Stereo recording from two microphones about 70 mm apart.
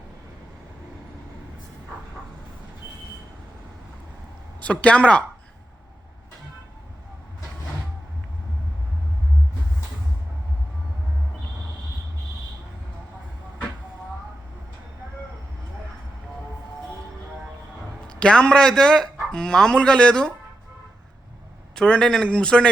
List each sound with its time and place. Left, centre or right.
4.6 s speech: centre
18.1 s speech: centre
21.8 s speech: centre